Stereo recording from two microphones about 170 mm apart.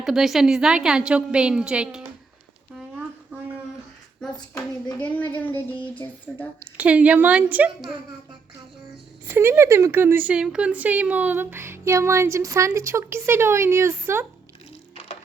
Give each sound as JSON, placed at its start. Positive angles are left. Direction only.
{"t": 0.0, "sound": "a woman's voice", "side_deg": 0}
{"t": 3.3, "sound": "a sound", "side_deg": -10}
{"t": 4.9, "sound": "a woman's voice", "side_deg": 10}
{"t": 6.6, "sound": "speech", "side_deg": -10}
{"t": 9.2, "sound": "speech", "side_deg": -15}
{"t": 14.9, "sound": "music", "side_deg": 35}